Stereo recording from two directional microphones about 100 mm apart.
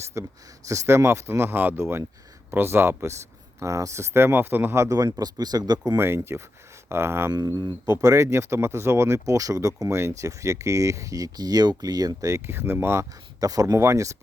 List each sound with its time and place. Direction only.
0.0 s speech: 30° right (ahead or behind)
6.0 s speech: 25° right (ahead or behind)
13.4 s speech: 40° right (ahead or behind)